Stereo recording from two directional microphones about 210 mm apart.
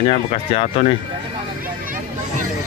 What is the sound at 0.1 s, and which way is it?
Speech, 30° left (ahead or behind).